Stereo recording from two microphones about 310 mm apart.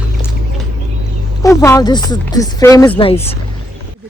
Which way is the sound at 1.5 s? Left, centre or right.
Centre.